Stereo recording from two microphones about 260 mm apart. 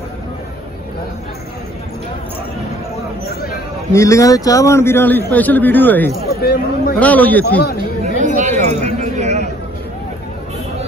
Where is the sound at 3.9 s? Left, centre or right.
Centre.